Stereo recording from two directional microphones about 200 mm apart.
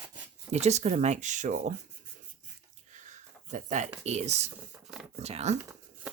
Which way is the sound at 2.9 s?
40° right (ahead or behind).